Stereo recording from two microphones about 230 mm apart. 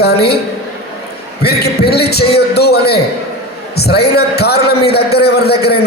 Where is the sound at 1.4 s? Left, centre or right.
Left.